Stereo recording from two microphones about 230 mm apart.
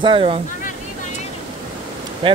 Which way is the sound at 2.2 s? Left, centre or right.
Right.